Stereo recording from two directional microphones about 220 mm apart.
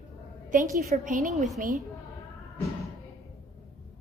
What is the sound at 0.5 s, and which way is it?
Speech, 40° right (ahead or behind).